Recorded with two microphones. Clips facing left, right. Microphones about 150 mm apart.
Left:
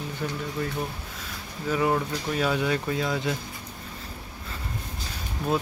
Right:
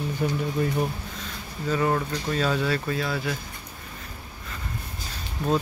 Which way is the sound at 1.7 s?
10° left (ahead or behind).